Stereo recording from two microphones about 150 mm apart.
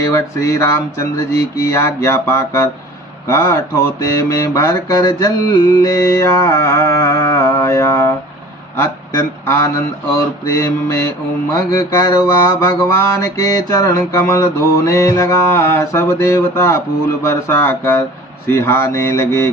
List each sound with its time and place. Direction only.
0.0 s mantra: 20° left (ahead or behind)
1.6 s speech: 20° left (ahead or behind)
4.0 s mantra: 20° left (ahead or behind)
8.7 s a sound: 15° left (ahead or behind)
10.4 s mantra: 20° left (ahead or behind)
18.4 s speech: 15° left (ahead or behind)